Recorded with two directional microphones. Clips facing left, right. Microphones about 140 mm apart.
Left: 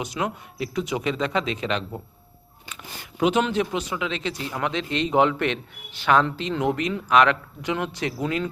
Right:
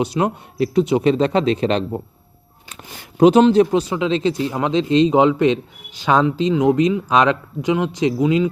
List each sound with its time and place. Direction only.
0.0 s speech: 30° right (ahead or behind)
3.2 s speech: 35° right (ahead or behind)
5.1 s a man's voice: 20° right (ahead or behind)